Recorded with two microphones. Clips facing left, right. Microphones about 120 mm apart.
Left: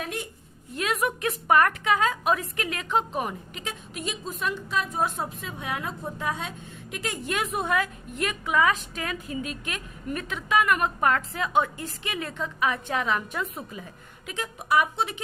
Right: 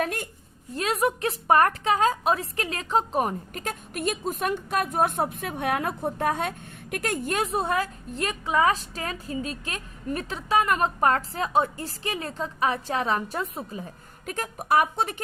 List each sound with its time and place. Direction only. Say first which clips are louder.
0.0 s a sound: right 5 dB; 55° right (ahead or behind)
0.7 s a woman's voice: right 2 dB; 35° right (ahead or behind); by 7.3 s 50° right (ahead or behind)
7.3 s a woman's voice: even; 30° right (ahead or behind)